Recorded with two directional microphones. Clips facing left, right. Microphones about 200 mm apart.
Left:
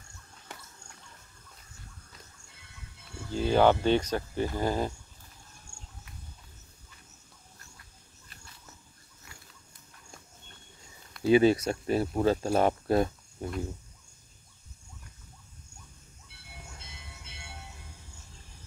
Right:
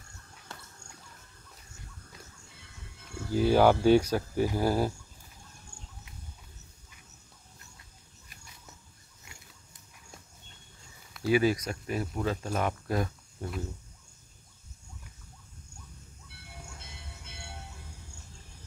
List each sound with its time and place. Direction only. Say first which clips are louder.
3.3 s speech: right 1 dB; 10° right (ahead or behind)
11.2 s speech: left 4 dB; 25° left (ahead or behind)
13.4 s speech: left 2 dB; 15° left (ahead or behind)